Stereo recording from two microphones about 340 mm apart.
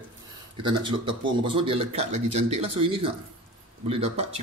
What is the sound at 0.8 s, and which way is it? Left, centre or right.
Speech, centre.